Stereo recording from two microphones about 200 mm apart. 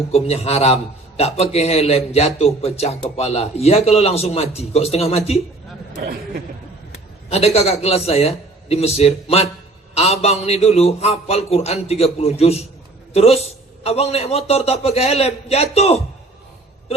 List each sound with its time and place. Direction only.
0.1 s a man's voice: 30° left (ahead or behind)
6.0 s speech: 50° right (ahead or behind)
7.3 s a man's voice: 30° left (ahead or behind)